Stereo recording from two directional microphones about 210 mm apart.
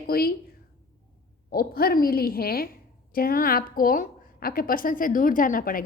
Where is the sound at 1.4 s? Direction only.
45° left (ahead or behind).